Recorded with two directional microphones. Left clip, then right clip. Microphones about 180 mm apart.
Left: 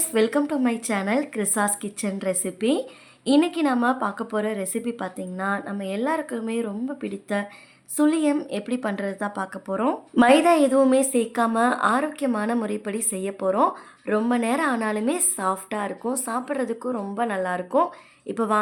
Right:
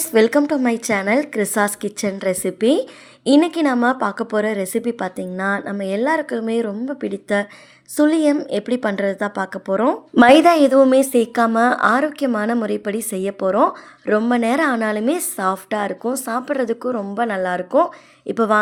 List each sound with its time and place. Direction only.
0.1 s a woman's voice: 35° right (ahead or behind)